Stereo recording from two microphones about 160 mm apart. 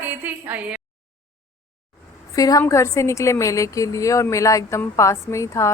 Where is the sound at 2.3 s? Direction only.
20° left (ahead or behind).